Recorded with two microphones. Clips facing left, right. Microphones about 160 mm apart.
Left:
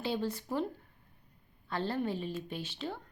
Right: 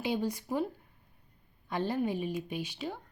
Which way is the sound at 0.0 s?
15° right (ahead or behind).